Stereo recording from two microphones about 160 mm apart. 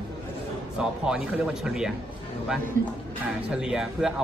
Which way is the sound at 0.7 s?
5° right (ahead or behind).